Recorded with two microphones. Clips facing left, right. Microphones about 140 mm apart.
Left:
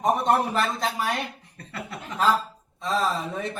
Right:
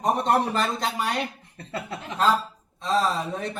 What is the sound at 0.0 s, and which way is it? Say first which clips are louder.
A man's voice: even; centre (ahead or behind).